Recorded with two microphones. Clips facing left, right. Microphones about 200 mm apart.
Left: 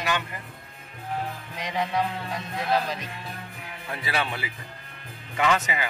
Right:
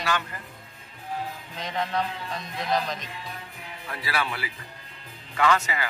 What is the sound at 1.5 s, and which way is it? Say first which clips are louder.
A man's voice: left 1 dB; 10° left (ahead or behind).